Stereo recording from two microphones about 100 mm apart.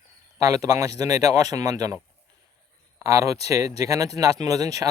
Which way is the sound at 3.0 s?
35° right (ahead or behind).